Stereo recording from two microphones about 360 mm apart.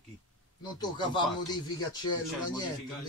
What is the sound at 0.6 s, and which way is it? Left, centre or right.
Speech, centre.